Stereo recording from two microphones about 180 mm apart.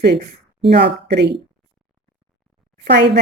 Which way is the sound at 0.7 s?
70° right (ahead or behind).